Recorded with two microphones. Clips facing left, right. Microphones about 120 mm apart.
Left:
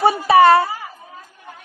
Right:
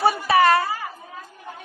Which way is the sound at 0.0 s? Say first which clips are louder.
Left 5 dB; 25° left (ahead or behind).